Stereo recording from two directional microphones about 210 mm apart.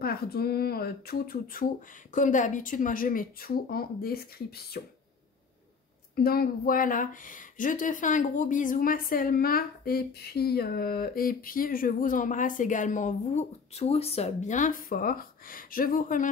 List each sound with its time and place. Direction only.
0.0 s speech: 45° left (ahead or behind)
6.1 s speech: 45° left (ahead or behind)